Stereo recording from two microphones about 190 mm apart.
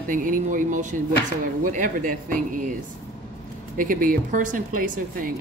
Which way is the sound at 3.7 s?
45° right (ahead or behind).